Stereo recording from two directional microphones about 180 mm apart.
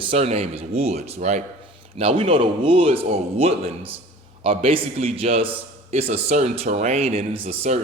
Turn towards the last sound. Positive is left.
turn(degrees=-40)  # may be behind; listen again after turning